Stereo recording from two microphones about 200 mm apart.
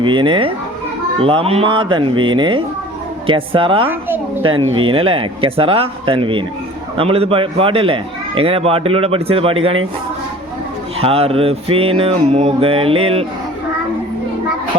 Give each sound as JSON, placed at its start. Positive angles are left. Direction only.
{"t": 0.0, "sound": "speech", "side_deg": -25}
{"t": 3.8, "sound": "a woman's voice", "side_deg": -10}
{"t": 4.8, "sound": "speech", "side_deg": -25}
{"t": 11.0, "sound": "speech", "side_deg": -30}